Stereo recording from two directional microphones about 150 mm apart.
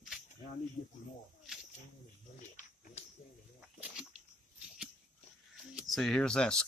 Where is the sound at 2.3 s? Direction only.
55° left (ahead or behind).